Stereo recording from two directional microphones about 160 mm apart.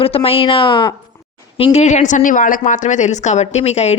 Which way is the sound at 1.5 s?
45° left (ahead or behind).